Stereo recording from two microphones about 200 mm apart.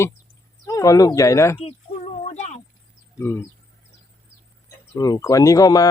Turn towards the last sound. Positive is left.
turn(degrees=15)  # may be behind; listen again after turning